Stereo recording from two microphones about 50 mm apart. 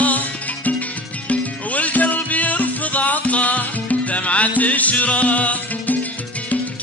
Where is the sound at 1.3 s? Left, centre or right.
Left.